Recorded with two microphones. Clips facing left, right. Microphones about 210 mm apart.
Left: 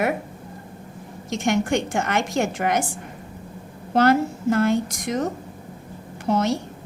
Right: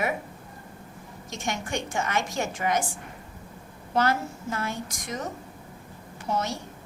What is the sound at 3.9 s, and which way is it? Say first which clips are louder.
A woman's voice: left 8 dB; 65° left (ahead or behind).